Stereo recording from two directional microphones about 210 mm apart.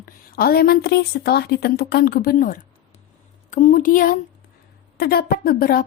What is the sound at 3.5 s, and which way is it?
Speech, 40° left (ahead or behind).